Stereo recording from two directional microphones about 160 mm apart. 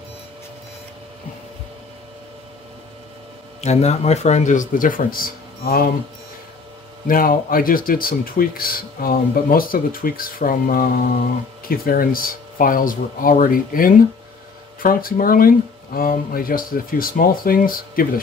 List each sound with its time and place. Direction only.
3.6 s speech: 45° left (ahead or behind); by 5.9 s 65° left (ahead or behind)
7.1 s speech: 60° left (ahead or behind)